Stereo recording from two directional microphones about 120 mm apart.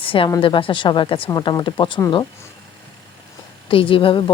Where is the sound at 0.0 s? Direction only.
50° left (ahead or behind).